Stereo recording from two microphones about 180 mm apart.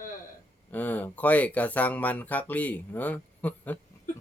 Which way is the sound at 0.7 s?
10° left (ahead or behind).